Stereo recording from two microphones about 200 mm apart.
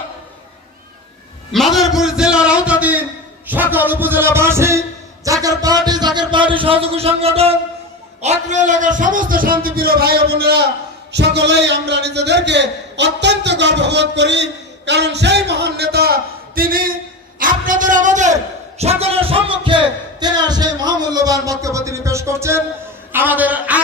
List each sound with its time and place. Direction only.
1.5 s a man's voice: centre (ahead or behind)